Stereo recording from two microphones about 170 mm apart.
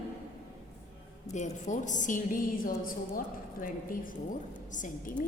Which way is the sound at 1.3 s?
45° left (ahead or behind).